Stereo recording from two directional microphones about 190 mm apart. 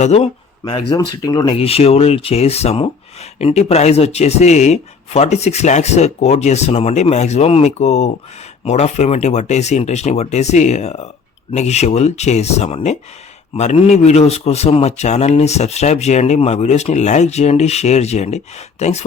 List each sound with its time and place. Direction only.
0.0 s a man's voice: 35° left (ahead or behind)
1.1 s speech: 20° left (ahead or behind)
1.5 s a man's voice: 30° left (ahead or behind)